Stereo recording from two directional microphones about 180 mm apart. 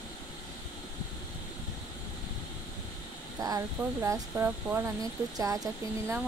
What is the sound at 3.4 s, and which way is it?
Speech, 20° right (ahead or behind).